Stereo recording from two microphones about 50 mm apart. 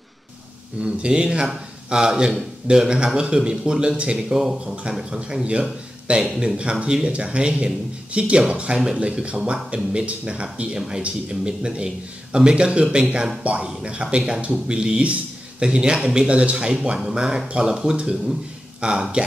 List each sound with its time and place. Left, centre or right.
0.7 s a man's voice: centre